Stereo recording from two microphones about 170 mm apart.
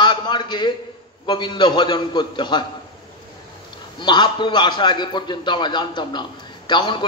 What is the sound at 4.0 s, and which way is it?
A man's voice, 25° left (ahead or behind).